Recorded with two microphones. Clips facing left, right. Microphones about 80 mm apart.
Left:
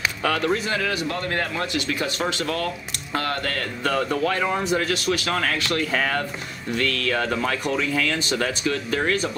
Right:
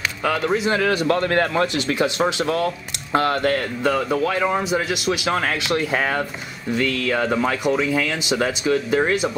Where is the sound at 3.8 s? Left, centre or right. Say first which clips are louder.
Right 1 dB; centre.